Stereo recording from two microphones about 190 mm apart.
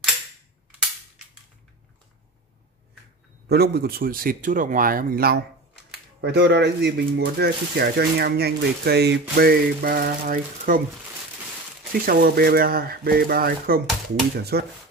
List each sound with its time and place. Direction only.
3.4 s speech: 55° right (ahead or behind)
11.9 s speech: 50° right (ahead or behind)